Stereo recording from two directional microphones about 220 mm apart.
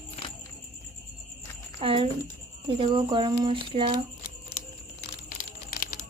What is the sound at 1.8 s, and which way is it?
Speech, 25° right (ahead or behind).